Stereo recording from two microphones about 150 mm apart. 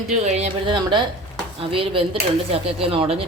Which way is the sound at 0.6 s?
30° right (ahead or behind).